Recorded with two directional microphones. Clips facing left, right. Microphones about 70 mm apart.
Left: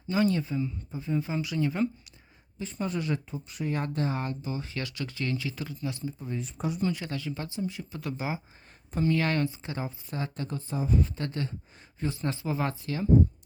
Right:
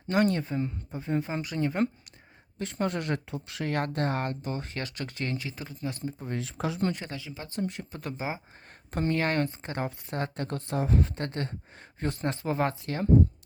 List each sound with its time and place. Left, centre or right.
0.1 s speech: right
2.6 s speech: right
3.8 s speech: right
6.2 s speech: right
7.0 s speech: right
7.5 s speech: right
7.9 s speech: right
9.7 s speech: right
11.2 s speech: right